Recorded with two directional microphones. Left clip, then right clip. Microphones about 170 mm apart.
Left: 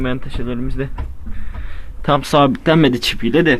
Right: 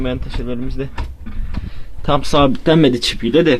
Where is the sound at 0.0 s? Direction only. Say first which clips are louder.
Even; centre (ahead or behind).